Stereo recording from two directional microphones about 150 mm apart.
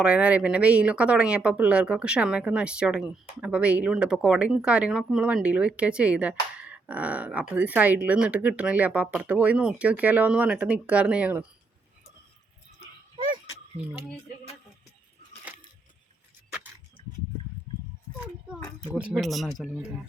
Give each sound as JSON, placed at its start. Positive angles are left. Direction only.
{"t": 0.0, "sound": "speech", "side_deg": -10}
{"t": 13.1, "sound": "a sound", "side_deg": -35}
{"t": 18.9, "sound": "speech", "side_deg": -5}